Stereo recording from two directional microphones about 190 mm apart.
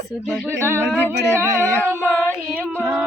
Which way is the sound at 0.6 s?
15° right (ahead or behind).